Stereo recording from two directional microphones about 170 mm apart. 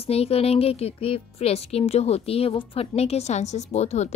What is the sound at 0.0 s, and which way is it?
A woman's voice, 35° left (ahead or behind).